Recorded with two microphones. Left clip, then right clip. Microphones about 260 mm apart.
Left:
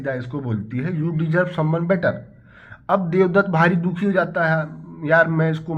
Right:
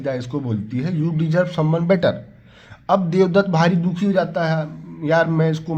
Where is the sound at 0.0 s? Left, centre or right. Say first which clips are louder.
Right 2 dB; right.